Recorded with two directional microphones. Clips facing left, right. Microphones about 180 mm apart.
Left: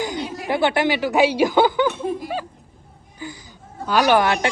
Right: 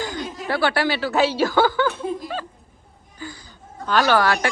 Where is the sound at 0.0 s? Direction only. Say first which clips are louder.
Left 3 dB; 15° left (ahead or behind).